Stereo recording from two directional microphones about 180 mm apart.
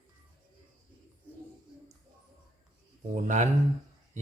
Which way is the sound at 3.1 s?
40° right (ahead or behind).